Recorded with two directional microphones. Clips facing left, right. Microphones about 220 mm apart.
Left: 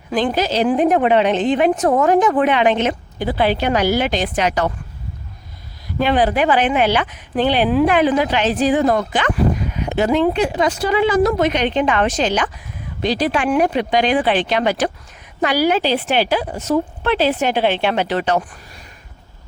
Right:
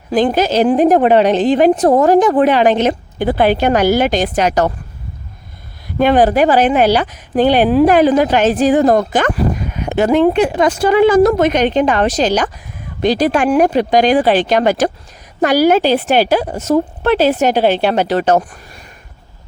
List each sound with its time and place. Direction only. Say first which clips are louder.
0.1 s a woman's voice: right 5 dB; 45° right (ahead or behind)
3.2 s speech: right 5 dB; 50° right (ahead or behind)
6.0 s speech: right 5 dB; 45° right (ahead or behind)